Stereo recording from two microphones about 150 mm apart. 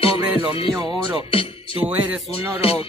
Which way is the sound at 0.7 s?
25° right (ahead or behind).